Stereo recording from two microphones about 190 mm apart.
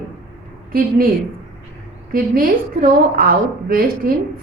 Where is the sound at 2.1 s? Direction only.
50° right (ahead or behind).